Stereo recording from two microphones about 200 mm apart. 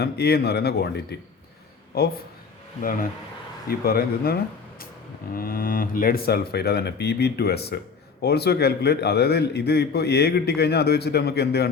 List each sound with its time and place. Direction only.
0.0 s a man's voice: 55° left (ahead or behind)
3.7 s a man's voice: 50° left (ahead or behind)